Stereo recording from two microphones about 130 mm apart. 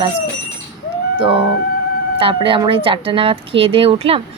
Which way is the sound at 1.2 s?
40° right (ahead or behind).